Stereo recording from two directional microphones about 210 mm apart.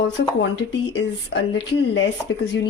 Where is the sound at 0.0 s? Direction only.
55° left (ahead or behind).